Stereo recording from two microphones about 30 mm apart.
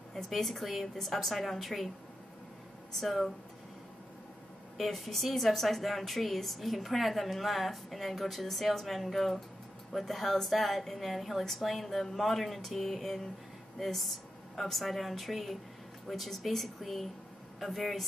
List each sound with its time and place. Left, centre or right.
0.3 s a woman's voice: centre
3.0 s a woman's voice: centre
4.7 s a woman's voice: centre